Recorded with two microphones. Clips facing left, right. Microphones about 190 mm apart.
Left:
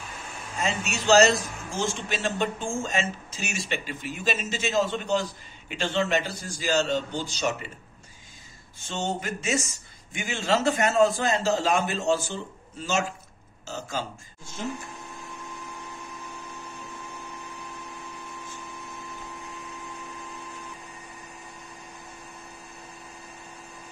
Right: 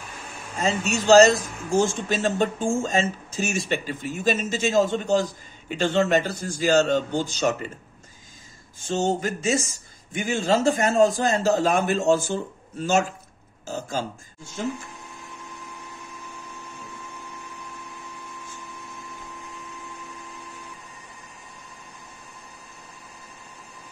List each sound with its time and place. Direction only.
0.9 s speech: 40° right (ahead or behind)
8.8 s speech: 45° right (ahead or behind)
13.7 s speech: 50° right (ahead or behind)